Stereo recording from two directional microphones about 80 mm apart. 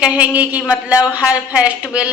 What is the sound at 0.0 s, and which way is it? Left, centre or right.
Speech, centre.